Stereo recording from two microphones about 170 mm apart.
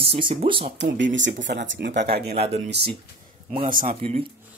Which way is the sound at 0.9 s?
90° right.